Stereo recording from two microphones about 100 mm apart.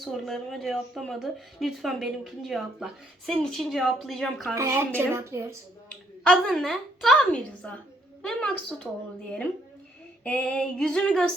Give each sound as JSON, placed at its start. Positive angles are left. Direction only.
{"t": 0.0, "sound": "speech", "side_deg": 0}
{"t": 4.5, "sound": "a woman's voice", "side_deg": -30}
{"t": 6.2, "sound": "speech", "side_deg": 5}
{"t": 7.6, "sound": "female singing", "side_deg": 15}
{"t": 10.2, "sound": "female singing", "side_deg": 10}